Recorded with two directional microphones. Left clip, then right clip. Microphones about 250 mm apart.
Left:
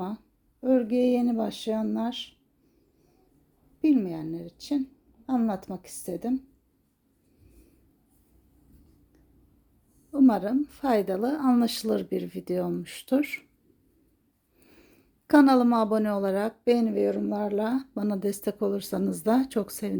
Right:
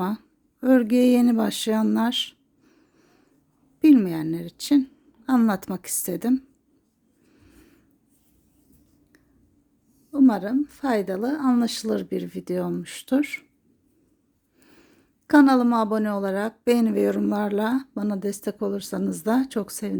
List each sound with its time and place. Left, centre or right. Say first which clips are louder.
0.6 s speech: right 4 dB; right
3.8 s speech: right 7 dB; right
10.1 s speech: right 2 dB; centre
14.6 s speech: right 2 dB; centre